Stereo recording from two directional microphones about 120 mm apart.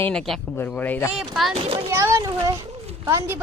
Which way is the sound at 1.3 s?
Centre (ahead or behind).